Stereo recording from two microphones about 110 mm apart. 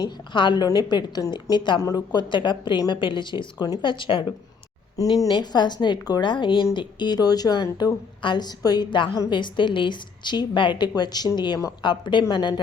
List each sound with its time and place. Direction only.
0.3 s a woman's voice: 45° left (ahead or behind)
5.0 s a woman's voice: 30° left (ahead or behind)